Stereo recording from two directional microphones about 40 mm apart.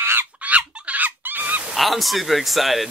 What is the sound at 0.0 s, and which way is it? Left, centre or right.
Chicken, right.